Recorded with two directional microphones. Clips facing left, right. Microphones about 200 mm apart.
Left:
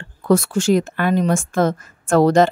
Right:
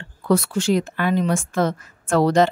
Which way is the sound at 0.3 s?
45° left (ahead or behind).